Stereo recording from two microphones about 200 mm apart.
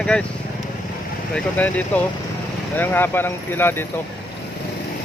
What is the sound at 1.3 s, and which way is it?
Speech, 5° left (ahead or behind).